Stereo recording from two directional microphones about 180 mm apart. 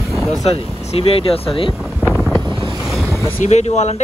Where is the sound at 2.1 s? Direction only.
Centre (ahead or behind).